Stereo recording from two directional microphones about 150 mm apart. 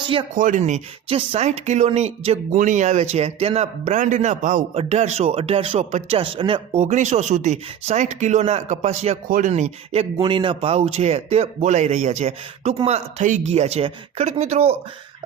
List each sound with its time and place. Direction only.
0.3 s speech: 60° right (ahead or behind); by 2.6 s 40° right (ahead or behind)
2.6 s speech: 55° right (ahead or behind)
4.7 s speech: 45° right (ahead or behind)
6.8 s speech: 55° right (ahead or behind)